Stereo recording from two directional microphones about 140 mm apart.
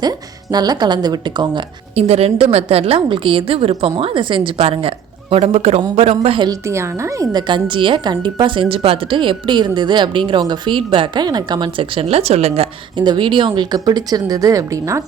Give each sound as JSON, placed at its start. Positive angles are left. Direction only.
{"t": 0.5, "sound": "speech", "side_deg": -30}
{"t": 2.0, "sound": "a woman's voice", "side_deg": -45}
{"t": 6.5, "sound": "a woman's voice", "side_deg": -20}
{"t": 13.0, "sound": "speech", "side_deg": -35}